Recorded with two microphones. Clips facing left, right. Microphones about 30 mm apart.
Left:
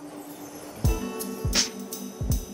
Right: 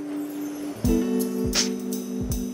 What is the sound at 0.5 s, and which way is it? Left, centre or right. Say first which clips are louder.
Music: right 8 dB; centre.